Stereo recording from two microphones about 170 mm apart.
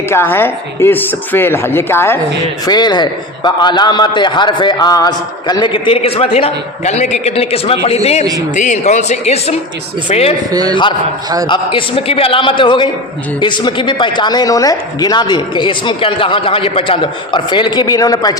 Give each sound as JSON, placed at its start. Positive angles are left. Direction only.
{"t": 0.1, "sound": "speech", "side_deg": 15}
{"t": 2.6, "sound": "a man's voice", "side_deg": 25}
{"t": 8.2, "sound": "speech", "side_deg": -20}
{"t": 8.5, "sound": "speech", "side_deg": 45}
{"t": 10.5, "sound": "speech", "side_deg": -20}
{"t": 11.4, "sound": "a man's voice", "side_deg": 30}